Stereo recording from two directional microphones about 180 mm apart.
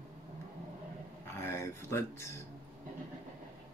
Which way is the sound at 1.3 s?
15° left (ahead or behind).